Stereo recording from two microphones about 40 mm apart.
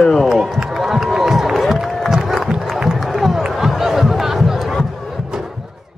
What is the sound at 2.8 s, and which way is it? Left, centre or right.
Run, centre.